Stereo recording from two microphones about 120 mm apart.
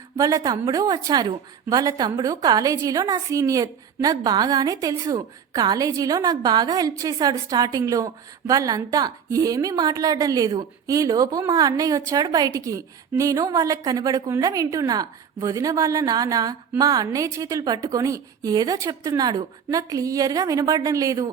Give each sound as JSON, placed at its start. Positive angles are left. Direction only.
{"t": 0.2, "sound": "a woman's voice", "side_deg": -30}